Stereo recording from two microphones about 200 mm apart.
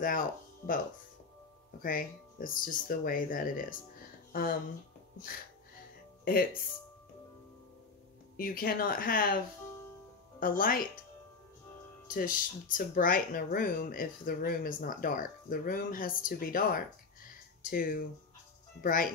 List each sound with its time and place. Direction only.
0.0 s speech: 45° left (ahead or behind)
1.8 s speech: 45° left (ahead or behind)
8.4 s speech: 45° left (ahead or behind)
10.4 s speech: 45° left (ahead or behind)
12.1 s speech: 45° left (ahead or behind)